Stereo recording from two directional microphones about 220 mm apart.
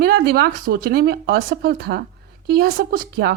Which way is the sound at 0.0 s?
45° right (ahead or behind).